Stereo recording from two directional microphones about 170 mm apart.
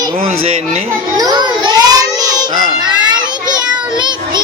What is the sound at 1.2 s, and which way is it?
Child singing, 20° right (ahead or behind).